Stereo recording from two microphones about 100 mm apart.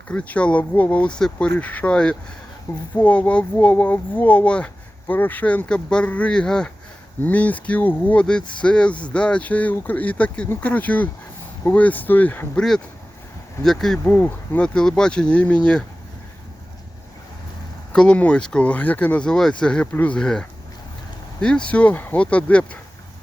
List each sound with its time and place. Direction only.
0.1 s speech: 10° left (ahead or behind)
2.7 s speech: 30° left (ahead or behind)
3.0 s speech: 15° left (ahead or behind)
13.7 s speech: 5° left (ahead or behind)
14.1 s speech: 15° left (ahead or behind)
17.9 s speech: 10° left (ahead or behind)